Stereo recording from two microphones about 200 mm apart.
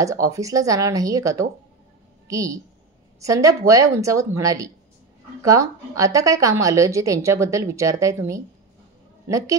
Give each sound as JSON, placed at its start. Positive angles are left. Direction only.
{"t": 0.0, "sound": "a woman's voice", "side_deg": -15}